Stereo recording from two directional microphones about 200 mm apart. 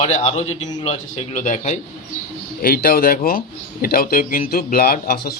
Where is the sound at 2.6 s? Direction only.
50° left (ahead or behind).